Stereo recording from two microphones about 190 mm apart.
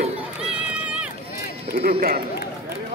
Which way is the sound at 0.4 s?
5° right (ahead or behind).